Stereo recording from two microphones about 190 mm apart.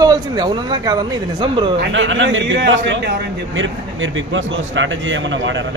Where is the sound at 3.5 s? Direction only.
85° right.